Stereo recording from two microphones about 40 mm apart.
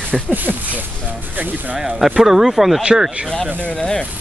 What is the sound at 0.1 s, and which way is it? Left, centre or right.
Speech, right.